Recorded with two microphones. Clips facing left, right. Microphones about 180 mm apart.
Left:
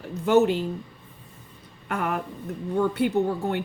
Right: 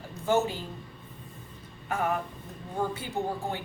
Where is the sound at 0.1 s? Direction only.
65° left (ahead or behind).